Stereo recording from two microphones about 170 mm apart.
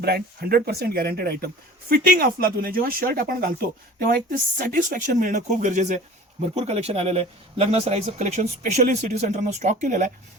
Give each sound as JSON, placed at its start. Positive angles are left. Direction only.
{"t": 0.0, "sound": "speech", "side_deg": -65}